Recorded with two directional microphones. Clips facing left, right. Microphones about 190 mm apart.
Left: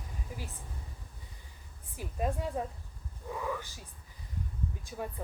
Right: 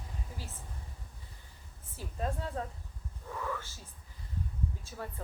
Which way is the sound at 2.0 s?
15° left (ahead or behind).